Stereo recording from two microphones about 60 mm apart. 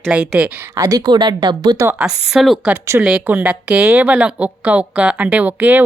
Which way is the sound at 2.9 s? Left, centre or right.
Right.